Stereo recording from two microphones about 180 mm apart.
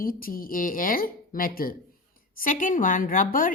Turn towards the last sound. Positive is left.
turn(degrees=50)  # may be behind; listen again after turning